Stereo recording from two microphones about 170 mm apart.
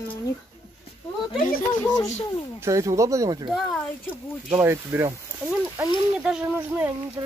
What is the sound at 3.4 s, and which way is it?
Speech, centre (ahead or behind).